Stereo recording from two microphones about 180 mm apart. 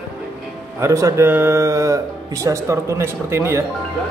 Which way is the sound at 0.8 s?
15° right (ahead or behind).